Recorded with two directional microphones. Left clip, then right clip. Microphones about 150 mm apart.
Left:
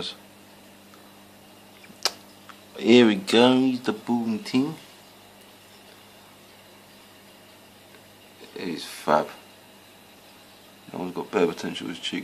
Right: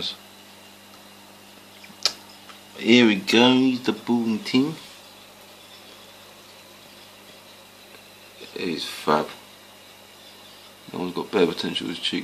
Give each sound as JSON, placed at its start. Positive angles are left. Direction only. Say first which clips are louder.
{"t": 2.0, "sound": "tick-tock", "louder": "right 3 dB", "side_deg": 35}
{"t": 2.8, "sound": "speech", "louder": "even", "side_deg": 20}
{"t": 8.5, "sound": "speech", "louder": "right 5 dB", "side_deg": 0}
{"t": 10.9, "sound": "speech", "louder": "right 3 dB", "side_deg": 0}